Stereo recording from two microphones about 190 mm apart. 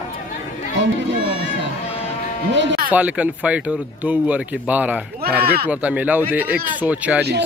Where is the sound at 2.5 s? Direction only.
70° right (ahead or behind).